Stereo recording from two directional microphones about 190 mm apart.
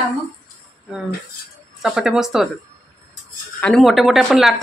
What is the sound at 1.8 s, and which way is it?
Speech, 5° right (ahead or behind).